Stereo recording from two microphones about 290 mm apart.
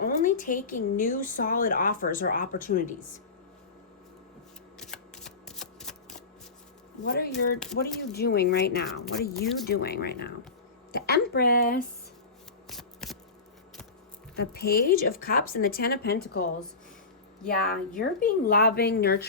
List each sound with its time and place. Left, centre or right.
0.0 s speech: left
4.8 s shuffling cards: centre
7.0 s speech: left
12.6 s shuffling cards: centre
14.3 s speech: left